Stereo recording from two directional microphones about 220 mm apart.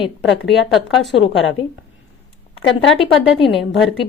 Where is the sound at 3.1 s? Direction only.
Centre (ahead or behind).